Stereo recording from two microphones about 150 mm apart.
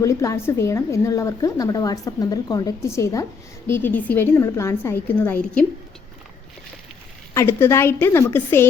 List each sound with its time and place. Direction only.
0.0 s a woman's voice: 20° left (ahead or behind)
7.3 s a woman's voice: 20° left (ahead or behind)